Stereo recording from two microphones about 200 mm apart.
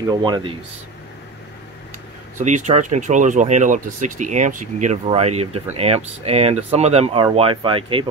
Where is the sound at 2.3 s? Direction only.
35° right (ahead or behind).